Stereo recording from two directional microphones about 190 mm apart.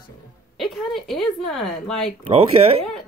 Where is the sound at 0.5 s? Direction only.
Centre (ahead or behind).